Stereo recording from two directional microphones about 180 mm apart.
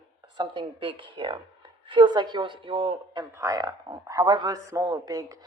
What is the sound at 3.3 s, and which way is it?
A woman's voice, 20° right (ahead or behind).